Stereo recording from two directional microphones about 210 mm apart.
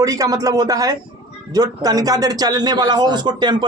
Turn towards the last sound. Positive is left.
turn(degrees=-20)  # may be behind; listen again after turning